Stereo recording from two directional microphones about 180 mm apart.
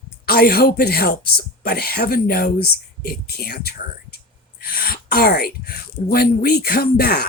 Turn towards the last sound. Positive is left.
turn(degrees=55)  # may be behind; listen again after turning